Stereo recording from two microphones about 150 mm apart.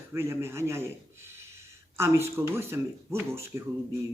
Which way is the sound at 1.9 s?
20° right (ahead or behind).